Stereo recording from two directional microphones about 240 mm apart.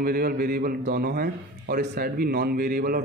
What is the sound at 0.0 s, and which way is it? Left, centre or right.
A man's voice, right.